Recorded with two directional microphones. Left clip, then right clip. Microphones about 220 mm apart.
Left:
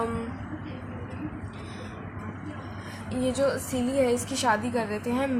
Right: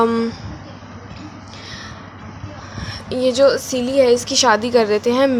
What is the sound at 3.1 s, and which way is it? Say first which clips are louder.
A woman's voice: right 12 dB; 40° right (ahead or behind).